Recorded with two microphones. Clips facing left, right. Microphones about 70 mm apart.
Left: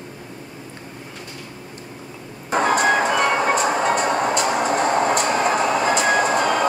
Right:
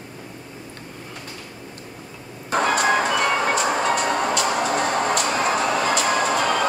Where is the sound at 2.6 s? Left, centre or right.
Left.